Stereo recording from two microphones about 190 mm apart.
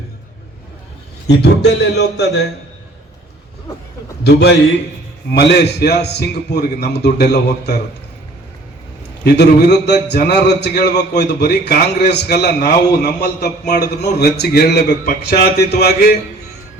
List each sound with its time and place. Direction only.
1.4 s a man's voice: 60° left (ahead or behind)
4.2 s a man's voice: 60° left (ahead or behind)
9.2 s a man's voice: 60° left (ahead or behind)